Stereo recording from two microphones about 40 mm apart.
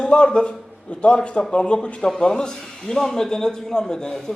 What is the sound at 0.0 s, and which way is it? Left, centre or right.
A man's voice, left.